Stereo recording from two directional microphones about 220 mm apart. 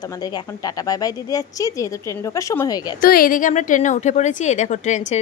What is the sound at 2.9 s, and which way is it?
A woman's voice, 40° left (ahead or behind).